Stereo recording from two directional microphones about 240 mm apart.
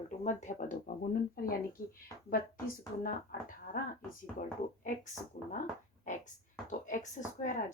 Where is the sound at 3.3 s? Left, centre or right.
Left.